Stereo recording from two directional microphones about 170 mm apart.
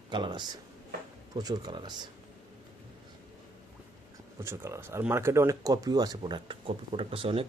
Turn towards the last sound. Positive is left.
turn(degrees=-35)  # may be behind; listen again after turning